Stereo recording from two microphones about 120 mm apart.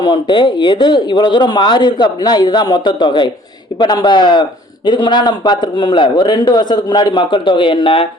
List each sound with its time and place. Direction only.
0.0 s speech: 40° left (ahead or behind)